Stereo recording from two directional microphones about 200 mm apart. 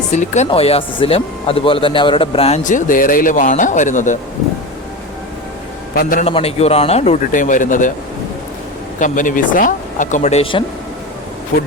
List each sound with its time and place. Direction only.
0.1 s speech: 35° left (ahead or behind)
5.9 s a man's voice: 45° left (ahead or behind)
6.2 s speech: 30° left (ahead or behind)
9.0 s speech: 40° left (ahead or behind)
11.5 s a man's voice: 50° left (ahead or behind)